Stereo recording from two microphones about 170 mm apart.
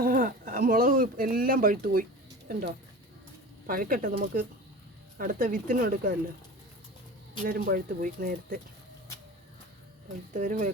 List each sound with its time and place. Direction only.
0.0 s speech: 55° right (ahead or behind)
7.4 s speech: 60° right (ahead or behind)
10.3 s speech: 45° right (ahead or behind)